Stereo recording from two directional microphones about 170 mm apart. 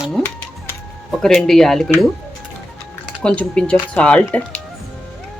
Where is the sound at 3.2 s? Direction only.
5° left (ahead or behind).